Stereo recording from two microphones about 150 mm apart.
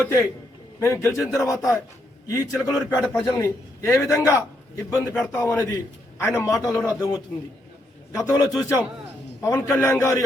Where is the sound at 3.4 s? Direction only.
20° left (ahead or behind).